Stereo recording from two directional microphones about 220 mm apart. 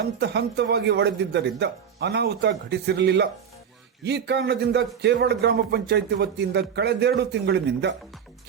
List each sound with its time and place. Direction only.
0.2 s a man's voice: 50° right (ahead or behind)